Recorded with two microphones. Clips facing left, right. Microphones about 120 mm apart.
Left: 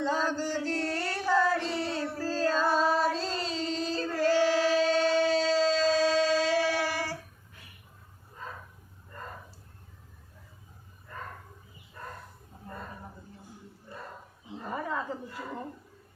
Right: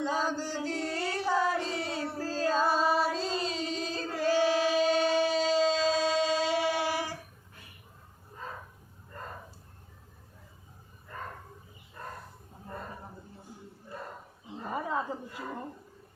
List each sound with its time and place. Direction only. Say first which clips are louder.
0.0 s female singing: left 2 dB; 10° right (ahead or behind)
2.2 s music: even; 10° right (ahead or behind)
14.7 s wild animals: right 1 dB; 20° right (ahead or behind)